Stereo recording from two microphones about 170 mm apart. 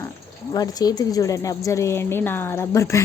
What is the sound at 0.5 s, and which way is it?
Speech, 20° left (ahead or behind).